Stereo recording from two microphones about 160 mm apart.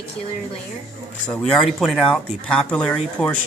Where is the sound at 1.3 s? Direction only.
5° left (ahead or behind).